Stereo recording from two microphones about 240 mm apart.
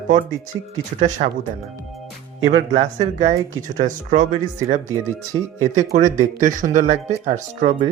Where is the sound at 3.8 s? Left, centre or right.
Right.